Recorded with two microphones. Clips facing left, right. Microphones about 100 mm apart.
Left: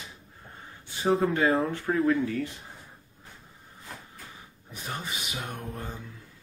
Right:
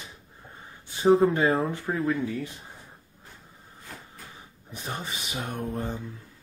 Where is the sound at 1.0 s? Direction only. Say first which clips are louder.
Right 4 dB; 20° right (ahead or behind).